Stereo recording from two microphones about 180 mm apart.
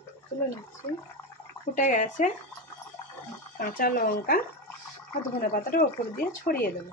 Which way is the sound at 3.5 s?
50° left (ahead or behind).